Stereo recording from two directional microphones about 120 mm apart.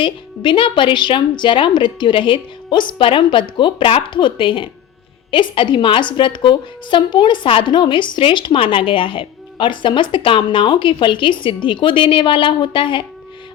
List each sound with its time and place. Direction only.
0.0 s a woman's voice: 45° left (ahead or behind)